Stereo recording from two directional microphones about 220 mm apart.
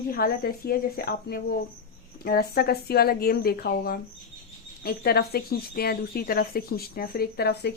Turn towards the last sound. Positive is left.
turn(degrees=50)  # may be behind; listen again after turning